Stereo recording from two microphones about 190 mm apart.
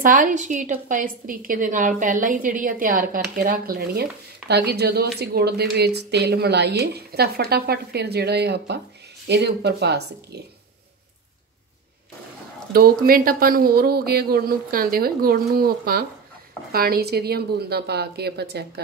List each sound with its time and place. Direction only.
0.0 s a woman's voice: 45° right (ahead or behind); by 10.4 s 60° right (ahead or behind)
12.7 s a woman's voice: 50° right (ahead or behind)